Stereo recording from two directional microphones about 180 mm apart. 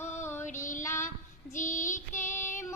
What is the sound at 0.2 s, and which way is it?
Child singing, 15° left (ahead or behind).